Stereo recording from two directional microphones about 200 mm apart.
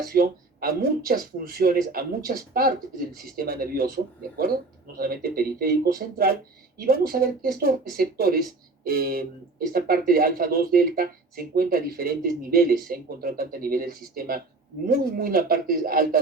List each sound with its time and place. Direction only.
0.0 s speech: 50° right (ahead or behind)